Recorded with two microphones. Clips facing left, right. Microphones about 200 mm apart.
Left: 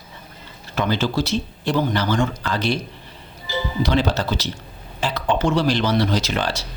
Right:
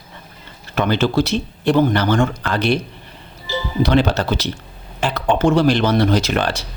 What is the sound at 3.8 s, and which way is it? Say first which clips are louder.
Speech: right 5 dB; 60° right (ahead or behind).